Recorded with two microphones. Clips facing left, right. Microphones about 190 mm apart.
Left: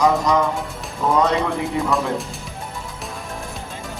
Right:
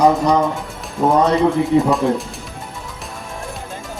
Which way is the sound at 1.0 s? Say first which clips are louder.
Right 5 dB; 55° right (ahead or behind).